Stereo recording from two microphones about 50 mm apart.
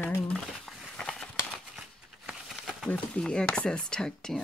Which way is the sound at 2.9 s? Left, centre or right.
Centre.